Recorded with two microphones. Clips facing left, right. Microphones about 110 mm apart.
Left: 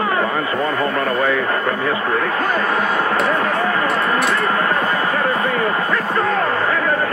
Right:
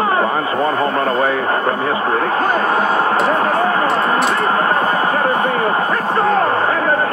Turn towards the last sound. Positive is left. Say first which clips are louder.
# right 3 dB
turn(degrees=-35)  # may be behind; listen again after turning